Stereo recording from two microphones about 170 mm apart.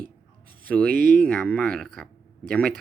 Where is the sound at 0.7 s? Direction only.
10° left (ahead or behind).